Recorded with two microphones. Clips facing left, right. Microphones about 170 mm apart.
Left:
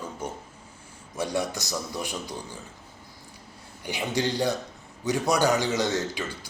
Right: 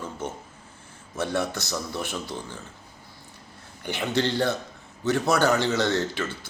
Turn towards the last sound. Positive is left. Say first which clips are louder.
# right 2 dB
turn(degrees=15)  # may be behind; listen again after turning